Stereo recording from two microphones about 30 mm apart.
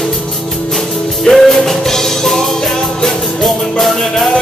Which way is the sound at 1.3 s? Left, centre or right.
Centre.